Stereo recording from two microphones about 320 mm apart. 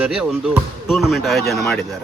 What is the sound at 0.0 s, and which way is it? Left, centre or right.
A man's voice, centre.